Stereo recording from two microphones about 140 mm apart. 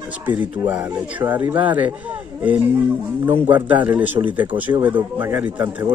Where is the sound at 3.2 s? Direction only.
15° right (ahead or behind).